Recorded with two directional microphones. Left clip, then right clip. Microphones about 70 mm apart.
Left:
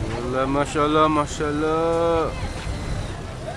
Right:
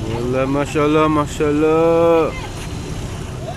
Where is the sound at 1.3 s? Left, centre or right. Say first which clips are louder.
Right 7 dB; right.